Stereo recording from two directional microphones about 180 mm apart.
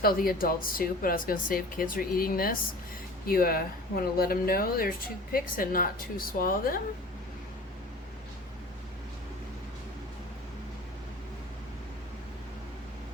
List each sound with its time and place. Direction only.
0.0 s speech: 55° left (ahead or behind)